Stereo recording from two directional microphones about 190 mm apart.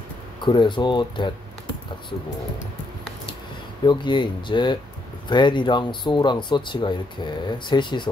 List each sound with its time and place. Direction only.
0.4 s speech: 25° left (ahead or behind)
3.8 s speech: 25° left (ahead or behind)